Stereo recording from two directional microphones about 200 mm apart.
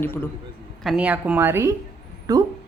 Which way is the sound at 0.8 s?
5° right (ahead or behind).